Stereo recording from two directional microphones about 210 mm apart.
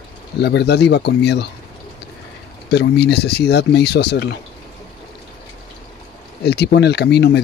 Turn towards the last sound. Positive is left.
turn(degrees=55)  # may be behind; listen again after turning